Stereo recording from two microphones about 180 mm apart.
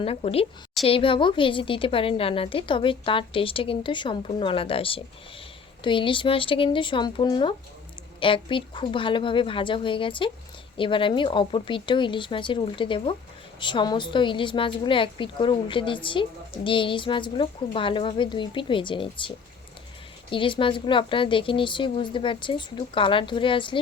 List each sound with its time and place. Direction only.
0.0 s a woman's voice: 35° left (ahead or behind)
20.3 s a woman's voice: 30° left (ahead or behind)